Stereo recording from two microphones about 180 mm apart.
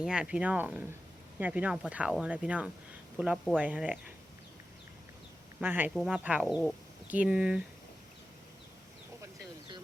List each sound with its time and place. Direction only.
0.0 s speech: 5° right (ahead or behind)
5.5 s speech: 10° right (ahead or behind)
9.2 s a sound: 25° right (ahead or behind)